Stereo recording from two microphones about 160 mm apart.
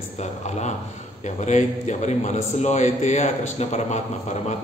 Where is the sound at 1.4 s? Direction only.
45° left (ahead or behind).